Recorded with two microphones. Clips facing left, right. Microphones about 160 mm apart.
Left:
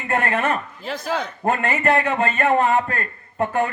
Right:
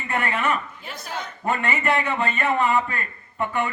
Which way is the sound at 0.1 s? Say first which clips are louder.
Left 3 dB; 45° left (ahead or behind).